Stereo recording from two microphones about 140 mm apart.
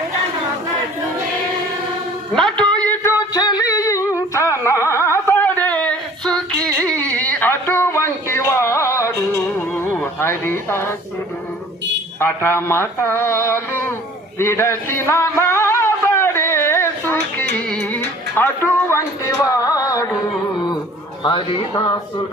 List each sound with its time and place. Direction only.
2.3 s music: 5° left (ahead or behind)
3.3 s music: 25° left (ahead or behind)
4.4 s a sound: 20° left (ahead or behind)
12.2 s speech: 15° left (ahead or behind)
14.3 s a sound: 20° left (ahead or behind)
21.2 s speech: 35° left (ahead or behind)